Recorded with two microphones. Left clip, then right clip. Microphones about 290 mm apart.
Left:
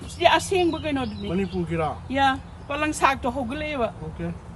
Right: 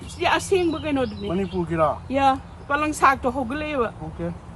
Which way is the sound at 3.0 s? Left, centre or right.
Centre.